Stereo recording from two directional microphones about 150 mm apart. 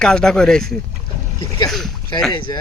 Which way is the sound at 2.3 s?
30° left (ahead or behind).